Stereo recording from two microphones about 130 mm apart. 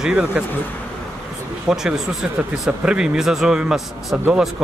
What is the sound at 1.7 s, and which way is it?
A man's voice, 5° right (ahead or behind).